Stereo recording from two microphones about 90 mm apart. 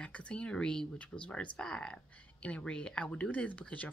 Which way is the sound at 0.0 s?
15° left (ahead or behind).